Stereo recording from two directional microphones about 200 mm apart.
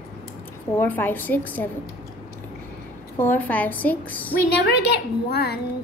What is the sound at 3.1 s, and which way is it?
A woman's voice, 10° left (ahead or behind).